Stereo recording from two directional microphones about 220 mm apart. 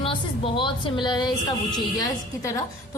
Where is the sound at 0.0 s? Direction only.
25° left (ahead or behind).